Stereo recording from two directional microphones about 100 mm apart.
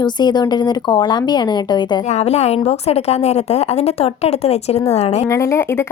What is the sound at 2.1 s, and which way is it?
A woman's voice, 90° left.